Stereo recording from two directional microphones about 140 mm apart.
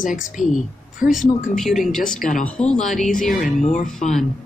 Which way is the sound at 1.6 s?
Centre (ahead or behind).